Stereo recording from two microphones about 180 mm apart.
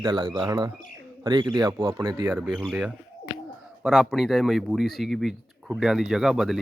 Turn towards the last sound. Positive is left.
turn(degrees=0)  # may be behind; listen again after turning